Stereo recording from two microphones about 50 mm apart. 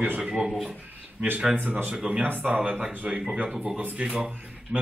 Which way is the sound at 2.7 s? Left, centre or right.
Centre.